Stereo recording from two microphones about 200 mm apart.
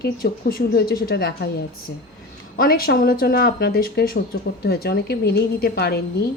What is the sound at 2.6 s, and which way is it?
Speech, 50° left (ahead or behind).